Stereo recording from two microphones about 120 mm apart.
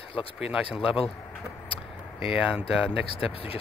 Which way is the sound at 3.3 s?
50° left (ahead or behind).